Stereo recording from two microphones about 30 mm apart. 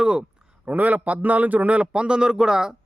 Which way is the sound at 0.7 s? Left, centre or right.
Right.